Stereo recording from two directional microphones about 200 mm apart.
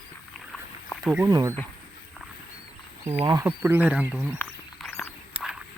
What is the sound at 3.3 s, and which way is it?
Speech, 15° right (ahead or behind).